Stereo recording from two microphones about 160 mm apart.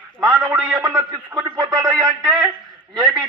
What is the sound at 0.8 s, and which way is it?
Speech, 20° right (ahead or behind).